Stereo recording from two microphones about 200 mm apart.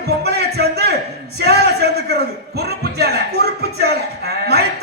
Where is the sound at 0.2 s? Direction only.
55° right (ahead or behind).